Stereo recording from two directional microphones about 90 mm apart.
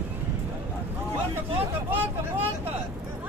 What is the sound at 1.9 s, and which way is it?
Vehicle, 25° right (ahead or behind).